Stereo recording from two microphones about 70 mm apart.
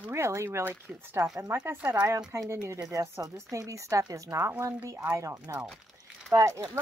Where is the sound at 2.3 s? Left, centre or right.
Right.